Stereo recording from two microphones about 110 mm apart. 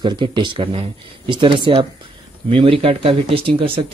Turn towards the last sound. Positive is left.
turn(degrees=-55)  # may be behind; listen again after turning